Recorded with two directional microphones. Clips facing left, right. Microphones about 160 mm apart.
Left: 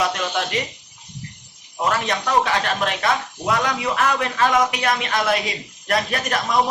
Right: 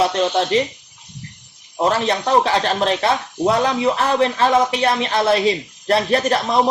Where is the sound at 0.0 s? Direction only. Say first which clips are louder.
Right 6 dB; 30° right (ahead or behind).